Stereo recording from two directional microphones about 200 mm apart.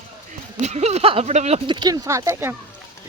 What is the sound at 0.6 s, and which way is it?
Speech, 35° right (ahead or behind).